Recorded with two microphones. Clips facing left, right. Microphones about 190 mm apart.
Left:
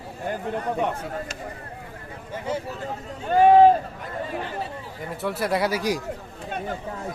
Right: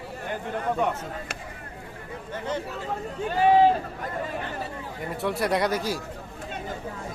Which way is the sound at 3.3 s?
50° left (ahead or behind).